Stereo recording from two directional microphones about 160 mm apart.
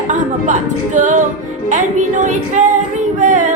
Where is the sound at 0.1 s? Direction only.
50° right (ahead or behind).